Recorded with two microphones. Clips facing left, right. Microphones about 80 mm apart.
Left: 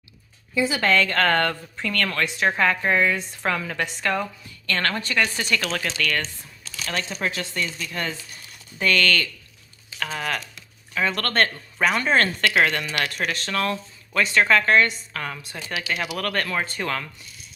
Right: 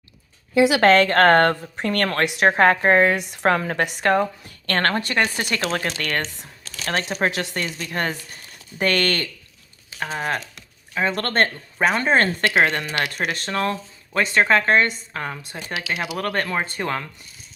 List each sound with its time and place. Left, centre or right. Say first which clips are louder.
0.5 s a woman's voice: right 6 dB; right
1.1 s a woman's voice: right 6 dB; right
2.2 s a woman's voice: right 6 dB; right
2.6 s speech: right 6 dB; right
3.2 s a woman's voice: right 6 dB; right
3.5 s a woman's voice: right 3 dB; right
4.4 s a woman's voice: right 4 dB; right
6.7 s a sound: right 4 dB; right
7.1 s speech: right 5 dB; right
7.5 s a woman's voice: right 2 dB; right
10.0 s a woman's voice: right 3 dB; right